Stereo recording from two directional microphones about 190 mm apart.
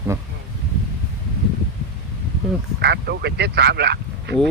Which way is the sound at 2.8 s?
60° right (ahead or behind).